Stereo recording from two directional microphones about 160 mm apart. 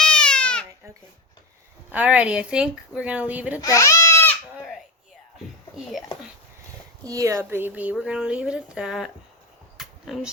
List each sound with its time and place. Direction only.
0.0 s baby cry: 5° left (ahead or behind)
1.9 s speech: 10° right (ahead or behind)
3.6 s goat: 20° left (ahead or behind)
7.0 s speech: 20° right (ahead or behind); by 9.1 s centre (ahead or behind)
9.7 s a sound: centre (ahead or behind)